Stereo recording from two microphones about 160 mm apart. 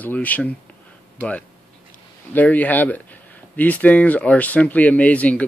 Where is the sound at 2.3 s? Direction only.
10° left (ahead or behind).